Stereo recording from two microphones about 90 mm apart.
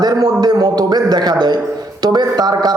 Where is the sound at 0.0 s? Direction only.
50° right (ahead or behind).